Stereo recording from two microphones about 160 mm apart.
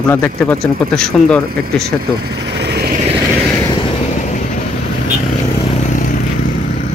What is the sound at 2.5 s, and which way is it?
Vehicle, 90° right.